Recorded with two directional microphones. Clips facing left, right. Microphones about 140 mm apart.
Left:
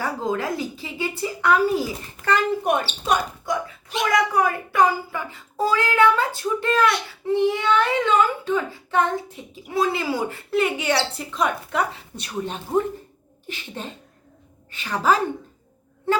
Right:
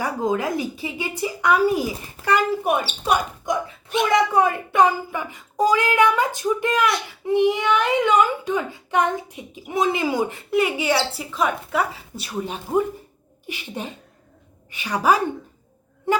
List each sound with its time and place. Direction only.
0.0 s speech: 15° right (ahead or behind)
3.5 s speech: 20° right (ahead or behind)
16.1 s a sound: 15° right (ahead or behind)